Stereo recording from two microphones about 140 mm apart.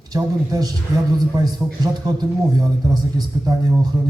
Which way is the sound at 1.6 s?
10° right (ahead or behind).